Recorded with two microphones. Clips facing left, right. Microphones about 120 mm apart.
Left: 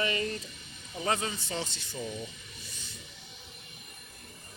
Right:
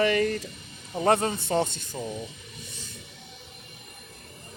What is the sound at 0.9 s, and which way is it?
Speech, 60° right (ahead or behind).